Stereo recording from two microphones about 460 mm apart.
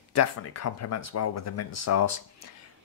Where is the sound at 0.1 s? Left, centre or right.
Left.